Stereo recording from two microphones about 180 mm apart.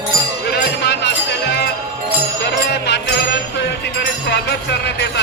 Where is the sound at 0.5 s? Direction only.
70° left (ahead or behind).